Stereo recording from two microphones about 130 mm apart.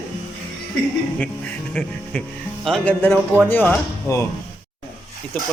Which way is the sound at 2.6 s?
5° left (ahead or behind).